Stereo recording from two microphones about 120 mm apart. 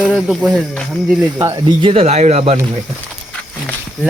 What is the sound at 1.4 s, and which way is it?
Speech, 35° right (ahead or behind).